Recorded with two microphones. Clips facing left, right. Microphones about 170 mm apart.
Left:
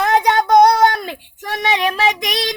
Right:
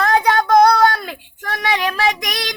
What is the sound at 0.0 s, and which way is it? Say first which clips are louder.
Child singing: left 1 dB; 25° left (ahead or behind).